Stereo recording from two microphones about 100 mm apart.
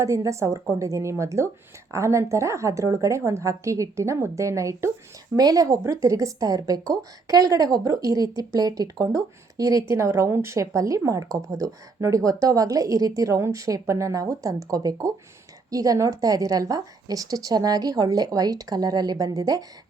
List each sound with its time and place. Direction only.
0.0 s speech: 30° right (ahead or behind)